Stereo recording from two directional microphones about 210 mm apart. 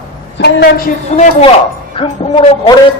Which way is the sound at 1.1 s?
30° left (ahead or behind).